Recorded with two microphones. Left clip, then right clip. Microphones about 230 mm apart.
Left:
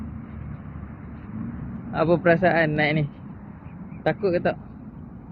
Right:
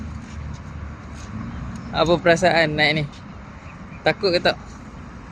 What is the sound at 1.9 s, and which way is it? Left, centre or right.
Speech, centre.